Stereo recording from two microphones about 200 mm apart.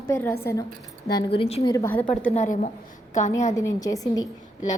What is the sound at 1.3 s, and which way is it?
Speech, 30° left (ahead or behind).